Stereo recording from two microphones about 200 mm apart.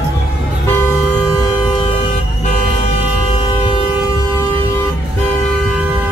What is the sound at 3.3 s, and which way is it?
Vehicle, 25° left (ahead or behind).